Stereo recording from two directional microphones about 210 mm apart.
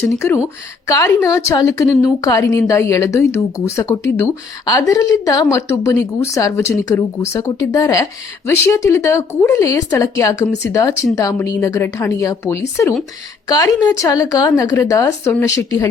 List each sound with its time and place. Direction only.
0.0 s a woman's voice: 10° left (ahead or behind)